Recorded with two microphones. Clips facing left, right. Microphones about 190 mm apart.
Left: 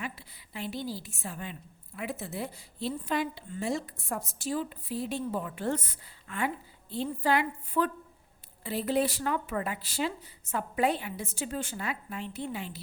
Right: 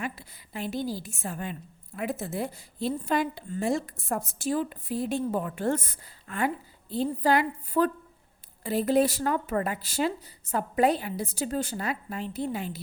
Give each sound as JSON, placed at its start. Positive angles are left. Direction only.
{"t": 0.0, "sound": "a woman's voice", "side_deg": -45}